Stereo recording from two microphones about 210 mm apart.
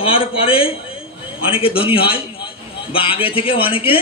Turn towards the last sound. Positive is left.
turn(degrees=25)  # may be behind; listen again after turning